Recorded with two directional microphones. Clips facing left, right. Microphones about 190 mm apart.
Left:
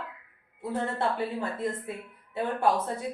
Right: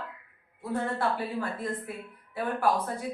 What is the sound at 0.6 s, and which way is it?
Speech, 25° left (ahead or behind).